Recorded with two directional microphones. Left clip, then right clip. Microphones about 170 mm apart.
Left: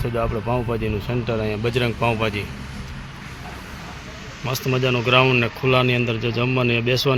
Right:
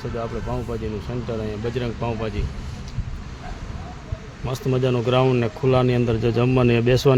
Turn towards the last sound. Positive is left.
turn(degrees=-40)  # may be behind; listen again after turning